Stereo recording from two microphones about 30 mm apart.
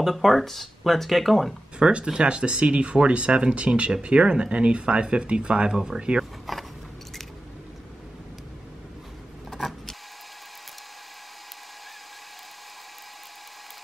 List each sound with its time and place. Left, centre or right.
0.0 s speech: centre
2.0 s speech: right
5.7 s speech: right
5.9 s speech: right
6.5 s biting: centre
9.5 s vehicle: centre